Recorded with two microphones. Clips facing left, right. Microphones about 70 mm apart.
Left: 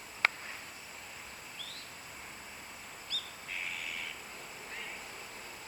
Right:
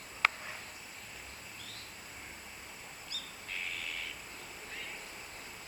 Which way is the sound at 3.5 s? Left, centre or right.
Centre.